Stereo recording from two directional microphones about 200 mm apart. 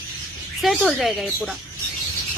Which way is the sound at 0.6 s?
Centre (ahead or behind).